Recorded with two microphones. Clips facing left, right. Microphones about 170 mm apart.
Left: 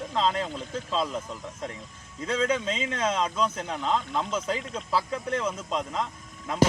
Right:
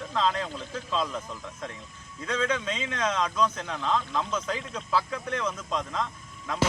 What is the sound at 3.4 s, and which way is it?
A man's voice, 15° left (ahead or behind).